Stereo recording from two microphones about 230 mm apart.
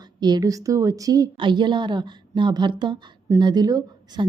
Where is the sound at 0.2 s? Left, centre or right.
Centre.